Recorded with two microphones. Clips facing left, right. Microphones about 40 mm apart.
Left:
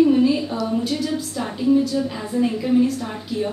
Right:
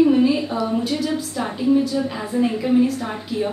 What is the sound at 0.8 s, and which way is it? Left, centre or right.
A woman's voice, centre.